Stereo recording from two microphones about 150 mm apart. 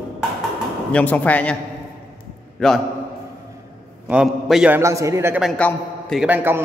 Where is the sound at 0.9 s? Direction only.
10° left (ahead or behind).